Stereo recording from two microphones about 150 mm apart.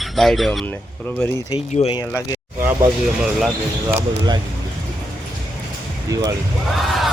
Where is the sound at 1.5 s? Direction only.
40° left (ahead or behind).